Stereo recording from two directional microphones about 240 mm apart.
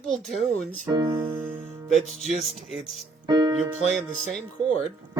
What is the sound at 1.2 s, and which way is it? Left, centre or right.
Music, centre.